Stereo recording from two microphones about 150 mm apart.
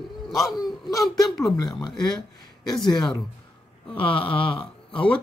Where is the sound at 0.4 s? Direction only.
Centre (ahead or behind).